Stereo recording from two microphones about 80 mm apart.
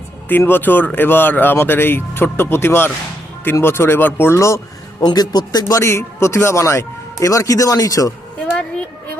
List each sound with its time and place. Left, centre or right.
0.3 s speech: left
4.4 s speech: left
5.0 s a man's voice: left
5.8 s a man's voice: left